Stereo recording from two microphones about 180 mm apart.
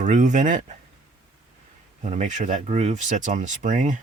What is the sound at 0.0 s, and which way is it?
Speech, 40° right (ahead or behind).